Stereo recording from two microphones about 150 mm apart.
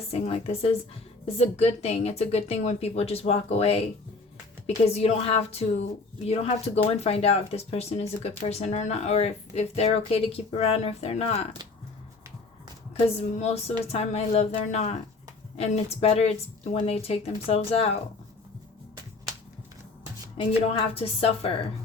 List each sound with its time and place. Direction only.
0.1 s a woman's voice: 40° left (ahead or behind)
13.3 s a woman's voice: 45° left (ahead or behind)
20.7 s a woman's voice: 40° left (ahead or behind)